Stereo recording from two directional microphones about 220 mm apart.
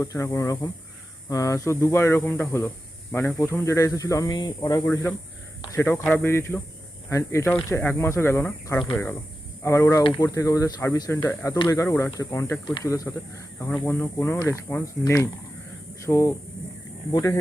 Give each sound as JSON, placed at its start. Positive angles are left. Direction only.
{"t": 0.0, "sound": "speech", "side_deg": 15}